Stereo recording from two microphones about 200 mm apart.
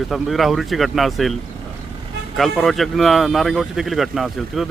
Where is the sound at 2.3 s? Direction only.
Centre (ahead or behind).